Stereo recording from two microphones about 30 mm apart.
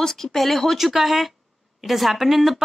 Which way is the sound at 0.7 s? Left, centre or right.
Centre.